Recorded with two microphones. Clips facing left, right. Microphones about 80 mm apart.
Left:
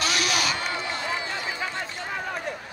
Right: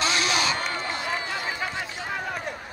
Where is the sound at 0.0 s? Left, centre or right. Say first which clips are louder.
Right 1 dB; right.